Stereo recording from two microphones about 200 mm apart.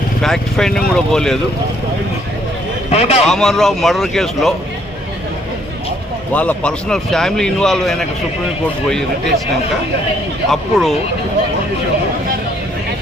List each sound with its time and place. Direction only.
0.2 s a man's voice: centre (ahead or behind)
2.9 s speech: 30° left (ahead or behind)
3.2 s a man's voice: centre (ahead or behind)
6.3 s a man's voice: 5° left (ahead or behind)
10.5 s a man's voice: centre (ahead or behind)